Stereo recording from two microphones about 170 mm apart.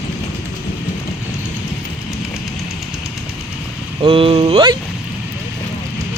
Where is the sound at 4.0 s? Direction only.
30° right (ahead or behind).